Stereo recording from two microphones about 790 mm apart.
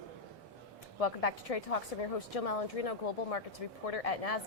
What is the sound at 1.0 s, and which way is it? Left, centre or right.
A woman's voice, left.